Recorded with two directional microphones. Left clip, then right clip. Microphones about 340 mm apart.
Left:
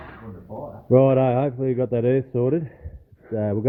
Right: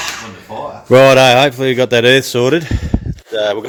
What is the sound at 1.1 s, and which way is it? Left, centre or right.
Speech, right.